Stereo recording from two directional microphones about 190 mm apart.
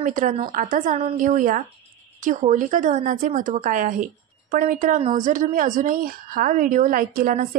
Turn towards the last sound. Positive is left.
turn(degrees=-45)  # may be behind; listen again after turning